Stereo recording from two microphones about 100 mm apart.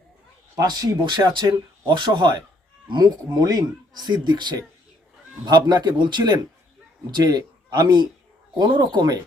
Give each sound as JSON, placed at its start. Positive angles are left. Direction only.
{"t": 0.5, "sound": "speech", "side_deg": -40}